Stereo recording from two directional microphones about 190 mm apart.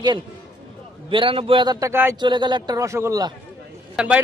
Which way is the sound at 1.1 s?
25° right (ahead or behind).